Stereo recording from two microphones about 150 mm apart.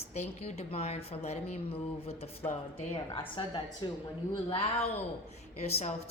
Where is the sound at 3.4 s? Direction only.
30° left (ahead or behind).